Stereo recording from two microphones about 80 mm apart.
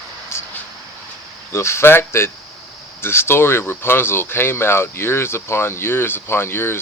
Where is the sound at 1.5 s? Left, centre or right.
Left.